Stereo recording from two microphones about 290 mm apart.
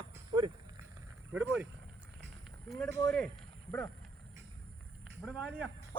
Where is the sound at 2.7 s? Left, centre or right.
Centre.